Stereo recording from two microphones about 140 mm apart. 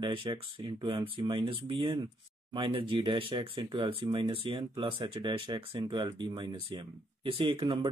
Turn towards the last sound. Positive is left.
turn(degrees=-35)  # may be behind; listen again after turning